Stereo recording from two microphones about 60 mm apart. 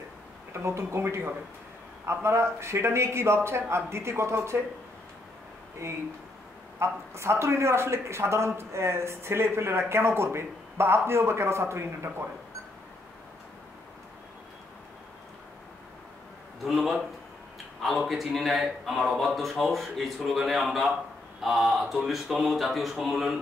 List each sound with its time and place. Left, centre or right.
0.5 s speech: right
5.8 s speech: right
16.6 s a man's voice: centre